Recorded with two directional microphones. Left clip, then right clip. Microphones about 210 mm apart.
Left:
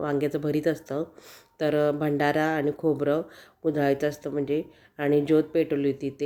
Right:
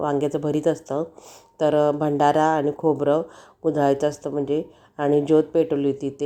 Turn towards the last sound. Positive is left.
turn(degrees=-5)  # may be behind; listen again after turning